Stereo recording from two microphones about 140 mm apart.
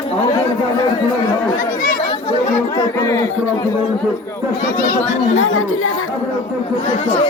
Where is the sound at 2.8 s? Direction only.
20° left (ahead or behind).